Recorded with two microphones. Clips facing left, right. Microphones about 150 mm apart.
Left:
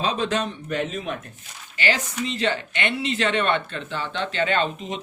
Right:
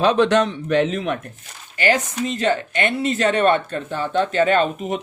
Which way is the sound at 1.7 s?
45° right (ahead or behind).